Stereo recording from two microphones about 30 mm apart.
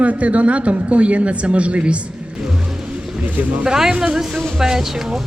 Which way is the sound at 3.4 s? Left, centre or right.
Right.